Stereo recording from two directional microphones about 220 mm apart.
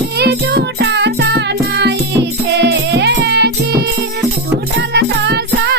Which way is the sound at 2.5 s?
50° right (ahead or behind).